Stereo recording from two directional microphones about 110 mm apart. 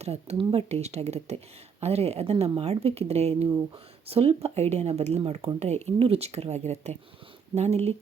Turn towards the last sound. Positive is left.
turn(degrees=-70)  # may be behind; listen again after turning